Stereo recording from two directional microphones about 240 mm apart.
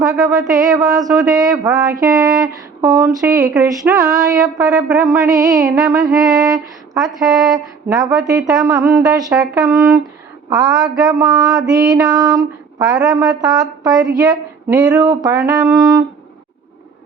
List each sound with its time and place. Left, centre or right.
0.3 s music: centre
4.6 s music: centre
6.1 s a sound: centre
7.3 s speech: centre
7.5 s music: centre
14.1 s speech: centre
14.9 s music: centre